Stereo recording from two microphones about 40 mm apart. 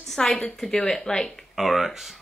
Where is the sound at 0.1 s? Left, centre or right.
Centre.